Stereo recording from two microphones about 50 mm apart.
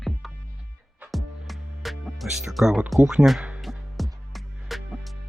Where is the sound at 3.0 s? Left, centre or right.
Right.